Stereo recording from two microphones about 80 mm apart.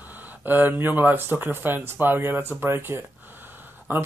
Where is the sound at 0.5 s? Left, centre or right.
Right.